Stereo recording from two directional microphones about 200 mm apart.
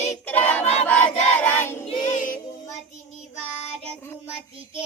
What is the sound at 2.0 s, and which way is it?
Child singing, 40° left (ahead or behind).